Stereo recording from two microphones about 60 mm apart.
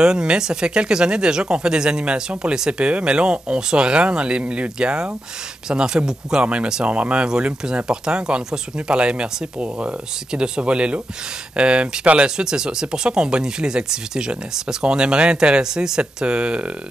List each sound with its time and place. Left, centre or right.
0.0 s speech: centre